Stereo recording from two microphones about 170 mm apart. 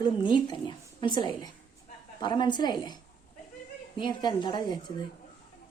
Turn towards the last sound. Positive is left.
turn(degrees=25)  # may be behind; listen again after turning